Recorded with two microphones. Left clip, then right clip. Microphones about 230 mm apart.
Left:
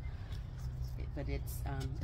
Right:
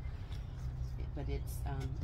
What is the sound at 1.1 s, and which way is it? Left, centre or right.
Speech, left.